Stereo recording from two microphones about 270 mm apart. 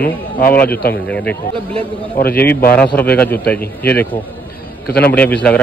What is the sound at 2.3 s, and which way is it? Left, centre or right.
A man's voice, centre.